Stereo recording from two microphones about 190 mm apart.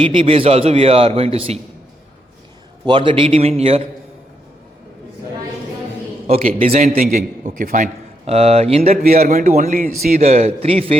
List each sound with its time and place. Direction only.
0.0 s a man's voice: 30° right (ahead or behind)
2.8 s a man's voice: 25° right (ahead or behind)
6.7 s a man's voice: 40° right (ahead or behind)
9.0 s a man's voice: 50° right (ahead or behind); by 10.9 s 30° right (ahead or behind)